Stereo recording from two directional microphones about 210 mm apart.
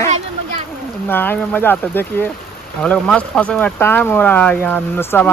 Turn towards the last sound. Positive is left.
turn(degrees=10)  # may be behind; listen again after turning